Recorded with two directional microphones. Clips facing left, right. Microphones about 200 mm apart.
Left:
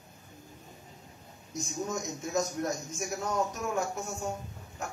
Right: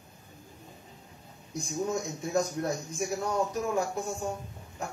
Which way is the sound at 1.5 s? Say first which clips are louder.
Right 3 dB; 30° right (ahead or behind).